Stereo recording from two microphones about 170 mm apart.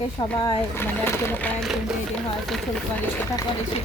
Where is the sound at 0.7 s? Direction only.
10° left (ahead or behind).